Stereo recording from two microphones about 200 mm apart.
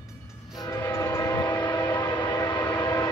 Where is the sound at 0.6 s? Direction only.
15° left (ahead or behind).